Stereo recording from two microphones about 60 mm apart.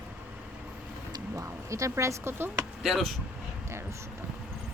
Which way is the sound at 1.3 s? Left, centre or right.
Right.